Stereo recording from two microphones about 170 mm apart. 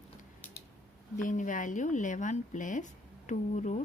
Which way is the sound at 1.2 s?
50° left (ahead or behind).